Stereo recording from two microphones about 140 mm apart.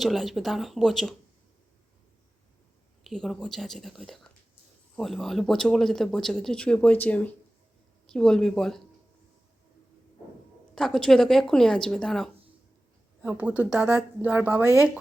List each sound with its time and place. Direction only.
0.0 s speech: centre (ahead or behind)
3.0 s speech: centre (ahead or behind)
10.8 s speech: 5° left (ahead or behind)
13.2 s speech: 10° right (ahead or behind)